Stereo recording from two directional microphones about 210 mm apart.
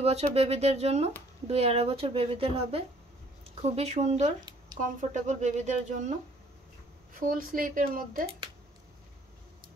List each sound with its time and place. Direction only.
0.0 s speech: 30° right (ahead or behind)
7.2 s speech: 40° right (ahead or behind)